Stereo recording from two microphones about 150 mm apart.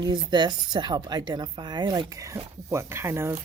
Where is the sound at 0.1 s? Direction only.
30° right (ahead or behind).